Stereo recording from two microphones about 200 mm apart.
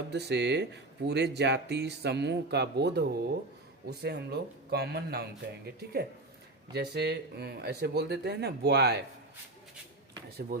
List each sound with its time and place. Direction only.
0.1 s speech: 55° right (ahead or behind)
10.5 s speech: 45° right (ahead or behind)